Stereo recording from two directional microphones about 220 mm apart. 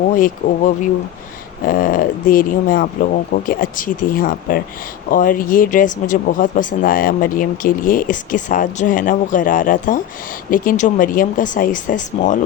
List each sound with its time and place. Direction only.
0.1 s speech: 40° left (ahead or behind)